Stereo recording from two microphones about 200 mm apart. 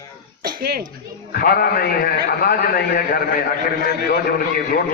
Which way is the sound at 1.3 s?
50° left (ahead or behind).